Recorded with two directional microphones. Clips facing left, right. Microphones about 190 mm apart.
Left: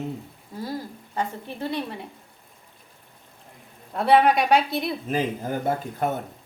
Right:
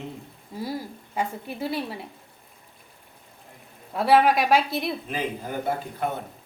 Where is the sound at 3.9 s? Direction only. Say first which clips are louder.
Left 1 dB; 5° right (ahead or behind).